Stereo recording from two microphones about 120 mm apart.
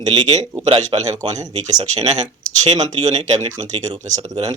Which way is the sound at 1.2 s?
30° right (ahead or behind).